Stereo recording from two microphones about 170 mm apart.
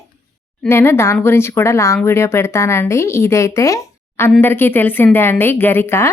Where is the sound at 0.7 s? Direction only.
15° left (ahead or behind).